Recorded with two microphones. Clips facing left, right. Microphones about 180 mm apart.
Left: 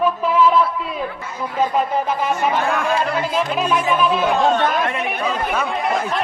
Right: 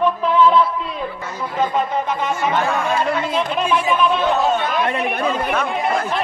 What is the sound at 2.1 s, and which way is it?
Speech, 5° left (ahead or behind).